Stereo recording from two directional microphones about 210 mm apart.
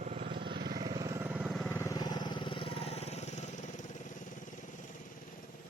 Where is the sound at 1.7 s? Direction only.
10° left (ahead or behind); by 3.3 s 30° left (ahead or behind).